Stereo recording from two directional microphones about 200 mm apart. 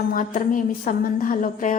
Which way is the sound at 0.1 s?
40° left (ahead or behind).